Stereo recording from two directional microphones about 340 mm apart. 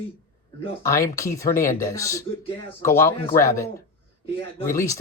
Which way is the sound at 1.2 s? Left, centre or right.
Centre.